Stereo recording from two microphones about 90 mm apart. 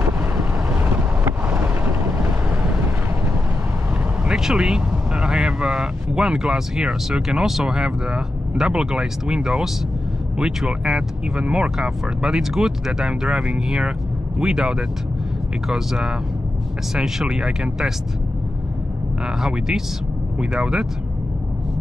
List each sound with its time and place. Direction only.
0.7 s vehicle: 20° right (ahead or behind)
4.2 s speech: 5° right (ahead or behind)
19.2 s speech: 5° right (ahead or behind)